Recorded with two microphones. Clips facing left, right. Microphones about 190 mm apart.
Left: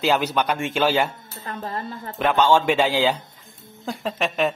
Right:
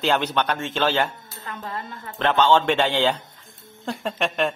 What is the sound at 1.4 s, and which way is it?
Speech, 35° left (ahead or behind).